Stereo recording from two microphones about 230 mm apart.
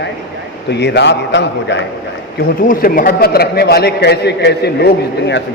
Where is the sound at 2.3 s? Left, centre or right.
Left.